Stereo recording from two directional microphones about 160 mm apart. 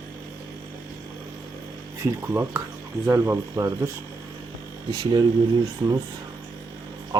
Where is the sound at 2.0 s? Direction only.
15° right (ahead or behind).